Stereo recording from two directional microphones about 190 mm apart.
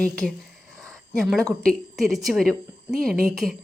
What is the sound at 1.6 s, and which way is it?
A woman's voice, centre (ahead or behind).